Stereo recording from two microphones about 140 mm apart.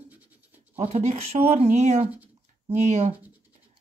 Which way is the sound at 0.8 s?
55° right (ahead or behind).